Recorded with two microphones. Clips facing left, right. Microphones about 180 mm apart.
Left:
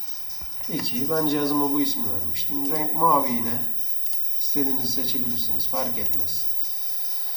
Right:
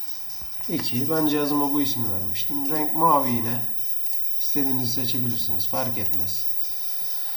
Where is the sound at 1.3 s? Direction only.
Centre (ahead or behind).